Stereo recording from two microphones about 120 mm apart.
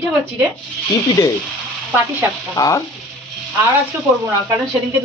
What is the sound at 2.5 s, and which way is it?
Speech, 30° left (ahead or behind).